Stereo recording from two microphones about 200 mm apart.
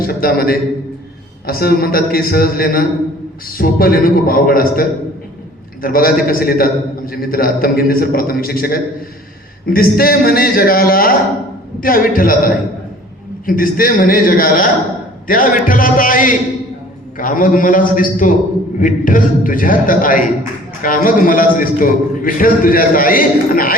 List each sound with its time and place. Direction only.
0.0 s a man's voice: 50° left (ahead or behind)